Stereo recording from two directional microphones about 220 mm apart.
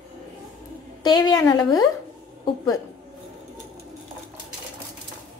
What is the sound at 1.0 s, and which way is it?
A woman's voice, 20° left (ahead or behind).